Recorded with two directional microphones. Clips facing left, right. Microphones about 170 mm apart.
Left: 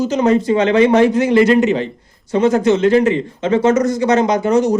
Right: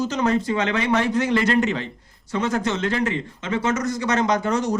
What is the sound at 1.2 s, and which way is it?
Speech, 10° left (ahead or behind).